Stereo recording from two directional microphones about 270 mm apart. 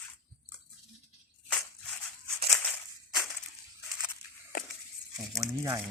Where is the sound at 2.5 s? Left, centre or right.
Centre.